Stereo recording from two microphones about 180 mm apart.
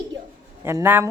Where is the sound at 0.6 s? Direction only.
15° right (ahead or behind).